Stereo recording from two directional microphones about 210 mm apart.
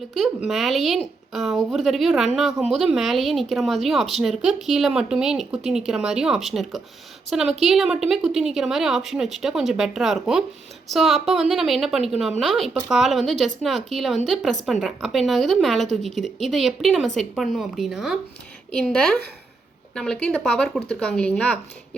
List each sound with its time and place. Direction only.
0.2 s speech: centre (ahead or behind)